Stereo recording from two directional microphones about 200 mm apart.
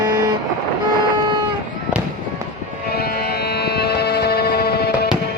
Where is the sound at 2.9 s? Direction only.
50° left (ahead or behind).